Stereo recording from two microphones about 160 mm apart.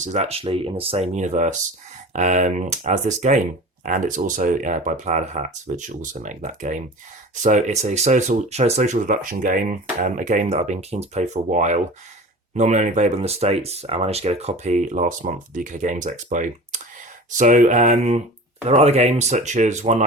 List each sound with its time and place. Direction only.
0.0 s speech: 45° right (ahead or behind)